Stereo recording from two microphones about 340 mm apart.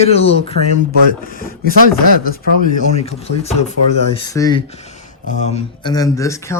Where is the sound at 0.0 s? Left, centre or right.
Centre.